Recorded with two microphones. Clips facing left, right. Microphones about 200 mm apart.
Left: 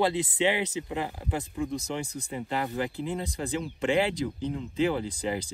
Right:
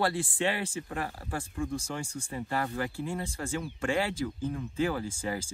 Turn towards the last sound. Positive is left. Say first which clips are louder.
# left 3 dB
turn(degrees=20)  # may be behind; listen again after turning